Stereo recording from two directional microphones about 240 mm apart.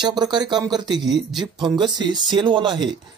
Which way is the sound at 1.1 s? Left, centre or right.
Centre.